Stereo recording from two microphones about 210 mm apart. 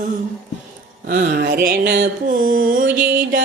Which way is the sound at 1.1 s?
40° right (ahead or behind).